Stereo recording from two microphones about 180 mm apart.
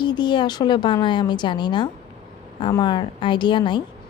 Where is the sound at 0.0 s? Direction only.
25° left (ahead or behind).